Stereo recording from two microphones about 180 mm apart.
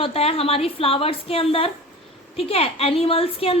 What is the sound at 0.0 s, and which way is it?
Speech, 35° left (ahead or behind).